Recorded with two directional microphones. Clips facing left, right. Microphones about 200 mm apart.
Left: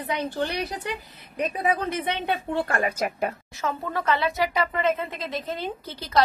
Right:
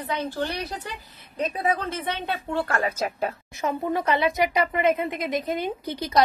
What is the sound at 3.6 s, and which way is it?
A woman's voice, 15° right (ahead or behind).